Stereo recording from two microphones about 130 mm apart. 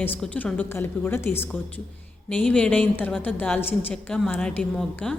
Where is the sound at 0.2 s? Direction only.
10° left (ahead or behind).